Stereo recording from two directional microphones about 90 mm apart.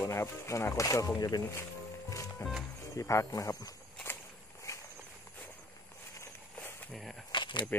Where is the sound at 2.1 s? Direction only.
35° left (ahead or behind).